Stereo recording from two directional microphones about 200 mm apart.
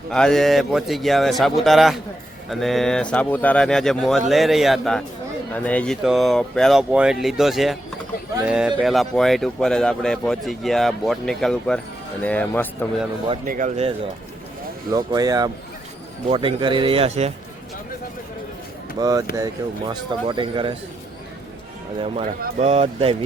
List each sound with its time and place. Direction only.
0.1 s speech: 5° left (ahead or behind)
13.4 s speech: 40° right (ahead or behind)
14.9 s speech: 20° right (ahead or behind)
18.9 s speech: 20° right (ahead or behind)
22.0 s speech: 35° right (ahead or behind)